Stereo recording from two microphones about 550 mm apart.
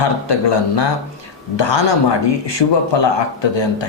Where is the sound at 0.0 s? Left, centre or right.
Left.